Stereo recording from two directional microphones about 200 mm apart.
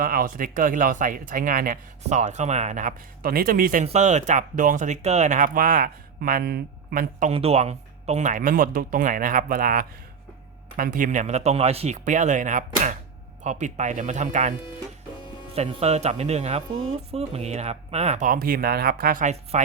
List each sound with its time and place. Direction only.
0.0 s speech: 45° right (ahead or behind)
7.3 s speech: 30° right (ahead or behind)
15.5 s speech: 35° right (ahead or behind)